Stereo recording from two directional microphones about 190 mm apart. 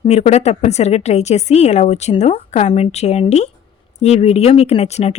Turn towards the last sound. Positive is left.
turn(degrees=35)  # may be behind; listen again after turning